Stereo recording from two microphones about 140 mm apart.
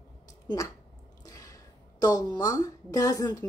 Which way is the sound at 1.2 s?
25° left (ahead or behind).